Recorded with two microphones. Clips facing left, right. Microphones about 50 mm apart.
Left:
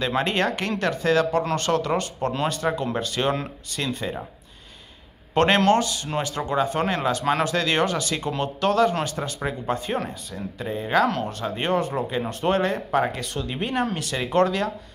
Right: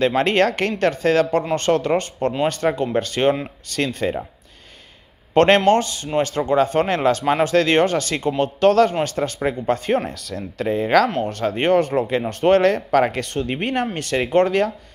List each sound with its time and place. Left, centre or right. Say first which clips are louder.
0.0 s speech: right 6 dB; right
3.2 s speech: right 6 dB; right
3.7 s speech: right 6 dB; right
5.3 s a man's voice: right 4 dB; right
10.0 s speech: right 4 dB; right
11.2 s speech: right 7 dB; right